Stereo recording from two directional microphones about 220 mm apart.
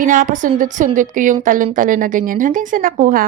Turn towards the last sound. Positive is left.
turn(degrees=-40)  # may be behind; listen again after turning